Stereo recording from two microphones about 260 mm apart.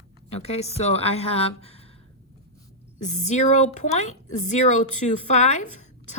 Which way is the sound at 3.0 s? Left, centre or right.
Left.